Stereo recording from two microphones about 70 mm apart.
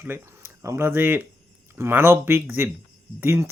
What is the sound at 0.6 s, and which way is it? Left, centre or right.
Speech, right.